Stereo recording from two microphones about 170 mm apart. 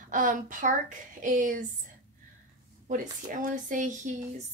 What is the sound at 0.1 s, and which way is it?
Speech, 50° right (ahead or behind).